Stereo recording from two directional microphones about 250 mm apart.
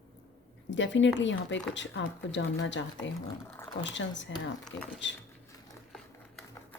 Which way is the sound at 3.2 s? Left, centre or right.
Centre.